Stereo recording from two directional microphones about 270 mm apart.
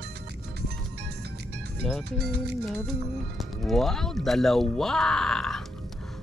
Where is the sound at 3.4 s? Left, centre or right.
Centre.